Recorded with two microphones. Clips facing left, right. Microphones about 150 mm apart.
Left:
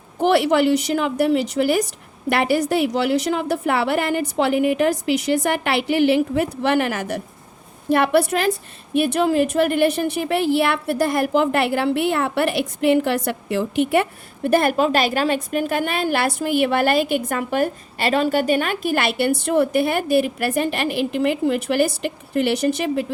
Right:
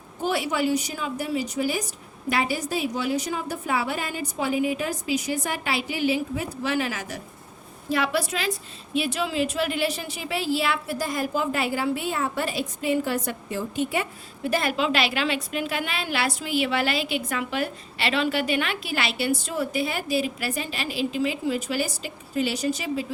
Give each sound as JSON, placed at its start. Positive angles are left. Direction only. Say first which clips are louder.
{"t": 0.2, "sound": "a woman's voice", "louder": "left 9 dB", "side_deg": 70}